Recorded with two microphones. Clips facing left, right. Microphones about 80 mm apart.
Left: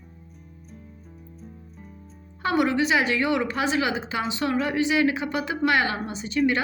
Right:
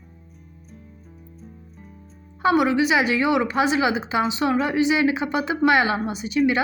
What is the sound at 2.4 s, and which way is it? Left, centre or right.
A woman's voice, centre.